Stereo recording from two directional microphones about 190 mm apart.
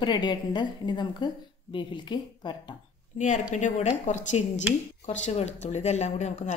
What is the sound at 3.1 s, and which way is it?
Speech, 40° left (ahead or behind).